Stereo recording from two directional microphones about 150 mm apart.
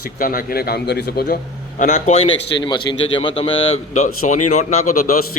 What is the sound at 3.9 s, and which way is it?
Speech, 50° left (ahead or behind).